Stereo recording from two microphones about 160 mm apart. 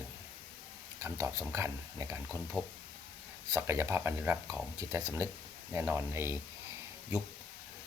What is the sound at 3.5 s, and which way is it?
Speech, 15° right (ahead or behind).